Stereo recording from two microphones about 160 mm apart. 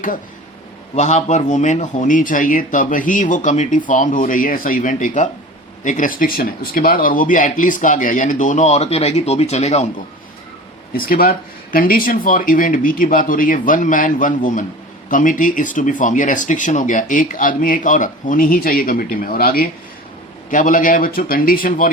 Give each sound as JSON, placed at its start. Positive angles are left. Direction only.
{"t": 0.9, "sound": "speech", "side_deg": 45}
{"t": 10.9, "sound": "speech", "side_deg": 65}
{"t": 20.5, "sound": "speech", "side_deg": 55}